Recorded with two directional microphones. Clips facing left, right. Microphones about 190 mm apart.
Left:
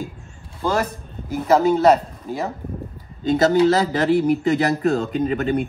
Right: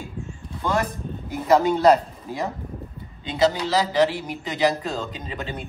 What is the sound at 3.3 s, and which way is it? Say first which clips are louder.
Speech: left 6 dB; 50° left (ahead or behind).